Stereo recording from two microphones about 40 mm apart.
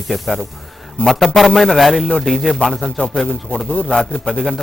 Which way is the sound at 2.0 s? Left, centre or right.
Centre.